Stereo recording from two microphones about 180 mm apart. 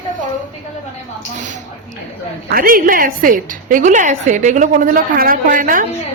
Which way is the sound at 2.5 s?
50° right (ahead or behind).